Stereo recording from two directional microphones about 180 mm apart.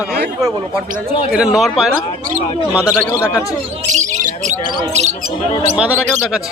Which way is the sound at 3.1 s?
15° left (ahead or behind).